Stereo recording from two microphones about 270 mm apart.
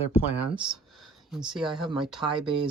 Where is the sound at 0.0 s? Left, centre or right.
Centre.